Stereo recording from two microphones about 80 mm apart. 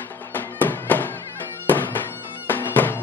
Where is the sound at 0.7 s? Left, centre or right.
Left.